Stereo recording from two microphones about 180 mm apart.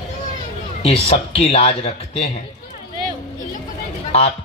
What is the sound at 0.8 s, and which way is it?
Speech, 35° left (ahead or behind).